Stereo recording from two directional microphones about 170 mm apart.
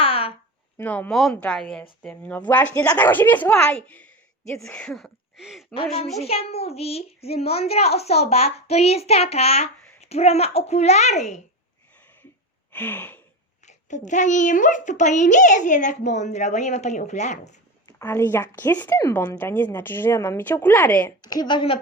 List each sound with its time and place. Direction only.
0.0 s a sound: 35° left (ahead or behind)
0.8 s a woman's voice: 10° left (ahead or behind)
4.8 s a sound: 5° left (ahead or behind)
6.1 s a child's voice: 35° left (ahead or behind)
12.7 s a woman's voice: 10° left (ahead or behind)
13.7 s a child's voice: 45° left (ahead or behind)
17.8 s a woman's voice: 15° left (ahead or behind)
21.2 s a woman's voice: 25° left (ahead or behind)